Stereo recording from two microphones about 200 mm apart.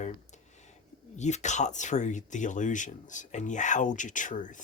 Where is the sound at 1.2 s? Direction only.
35° left (ahead or behind).